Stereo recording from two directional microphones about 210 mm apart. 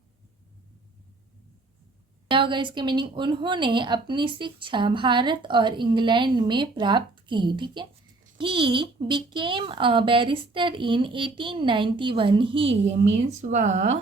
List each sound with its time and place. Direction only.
2.3 s speech: 25° right (ahead or behind)